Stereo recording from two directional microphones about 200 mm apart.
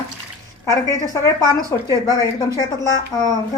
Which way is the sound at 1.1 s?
15° left (ahead or behind).